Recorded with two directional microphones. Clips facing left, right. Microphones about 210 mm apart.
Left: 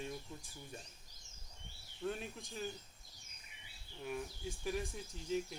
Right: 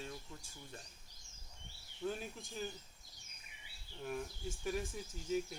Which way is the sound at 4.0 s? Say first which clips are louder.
Even; centre (ahead or behind).